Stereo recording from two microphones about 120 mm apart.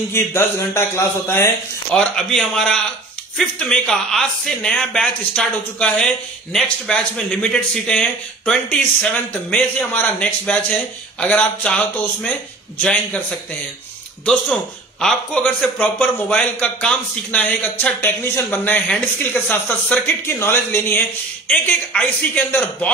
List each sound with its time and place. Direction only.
0.1 s speech: 20° left (ahead or behind)
2.0 s a man's voice: 5° left (ahead or behind)
14.2 s speech: 5° left (ahead or behind)